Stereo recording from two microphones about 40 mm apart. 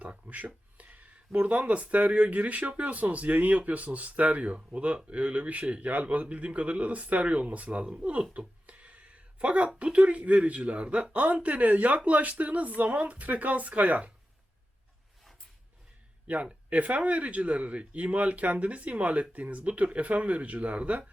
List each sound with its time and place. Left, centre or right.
0.0 s speech: right
16.2 s speech: right